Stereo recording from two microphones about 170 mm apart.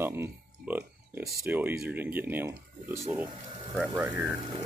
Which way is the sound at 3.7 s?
Centre (ahead or behind).